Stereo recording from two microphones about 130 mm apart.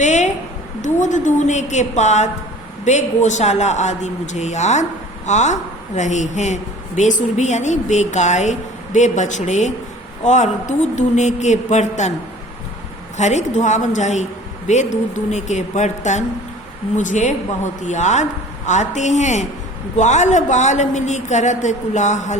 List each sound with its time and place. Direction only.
0.0 s a sound: 65° left (ahead or behind)
0.8 s a man's voice: 70° left (ahead or behind)
13.1 s a man's voice: 65° left (ahead or behind)